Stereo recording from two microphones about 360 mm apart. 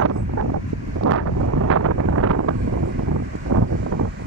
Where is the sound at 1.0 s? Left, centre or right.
Right.